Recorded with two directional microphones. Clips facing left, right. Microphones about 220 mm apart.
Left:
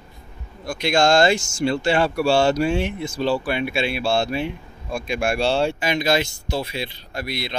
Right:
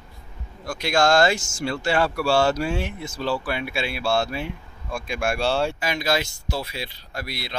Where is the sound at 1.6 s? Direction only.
25° left (ahead or behind).